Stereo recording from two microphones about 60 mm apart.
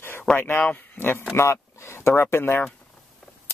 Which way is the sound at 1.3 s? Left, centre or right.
Left.